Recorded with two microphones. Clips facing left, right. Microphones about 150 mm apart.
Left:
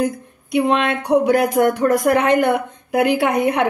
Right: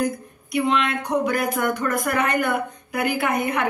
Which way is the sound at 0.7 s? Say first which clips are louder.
Left 5 dB; 70° left (ahead or behind).